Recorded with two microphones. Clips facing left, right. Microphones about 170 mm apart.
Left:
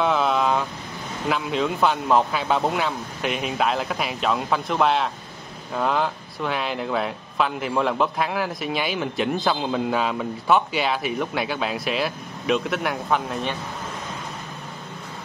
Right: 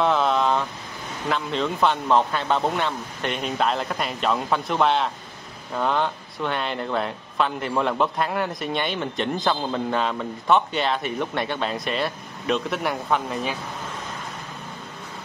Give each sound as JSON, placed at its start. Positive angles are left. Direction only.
{"t": 0.0, "sound": "vehicle", "side_deg": 0}
{"t": 1.3, "sound": "speech", "side_deg": 5}